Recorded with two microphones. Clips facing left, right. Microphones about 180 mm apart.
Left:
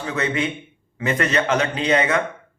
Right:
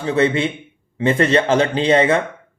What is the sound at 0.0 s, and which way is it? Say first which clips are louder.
A man's voice: right 6 dB; 30° right (ahead or behind).